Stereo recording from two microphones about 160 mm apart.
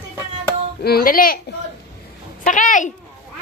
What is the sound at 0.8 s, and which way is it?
Speech, 65° left (ahead or behind).